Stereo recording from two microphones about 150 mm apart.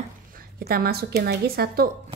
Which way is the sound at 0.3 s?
75° right (ahead or behind).